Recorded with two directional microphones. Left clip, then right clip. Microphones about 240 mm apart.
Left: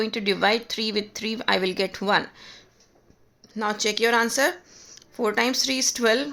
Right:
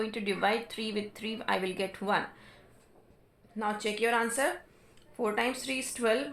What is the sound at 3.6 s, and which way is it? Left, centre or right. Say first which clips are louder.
Speech: left 7 dB; left.